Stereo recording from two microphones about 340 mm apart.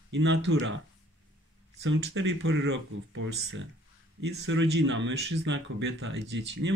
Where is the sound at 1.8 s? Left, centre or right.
Right.